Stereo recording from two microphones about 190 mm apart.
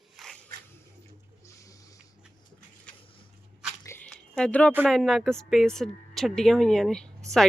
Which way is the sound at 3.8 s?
5° left (ahead or behind).